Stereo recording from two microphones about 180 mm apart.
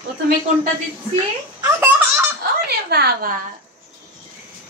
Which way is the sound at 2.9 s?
65° right (ahead or behind).